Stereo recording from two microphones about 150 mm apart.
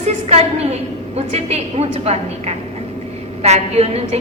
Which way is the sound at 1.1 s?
45° right (ahead or behind).